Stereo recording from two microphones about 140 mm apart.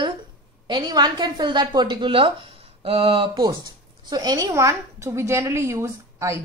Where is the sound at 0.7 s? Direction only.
30° right (ahead or behind).